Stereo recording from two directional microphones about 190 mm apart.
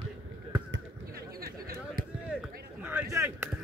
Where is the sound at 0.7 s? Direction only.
60° right (ahead or behind).